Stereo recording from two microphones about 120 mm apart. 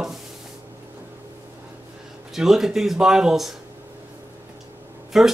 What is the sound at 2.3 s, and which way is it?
Speech, 5° right (ahead or behind).